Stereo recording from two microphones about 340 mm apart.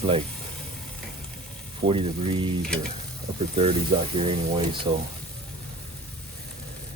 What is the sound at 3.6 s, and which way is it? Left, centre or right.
Speech, centre.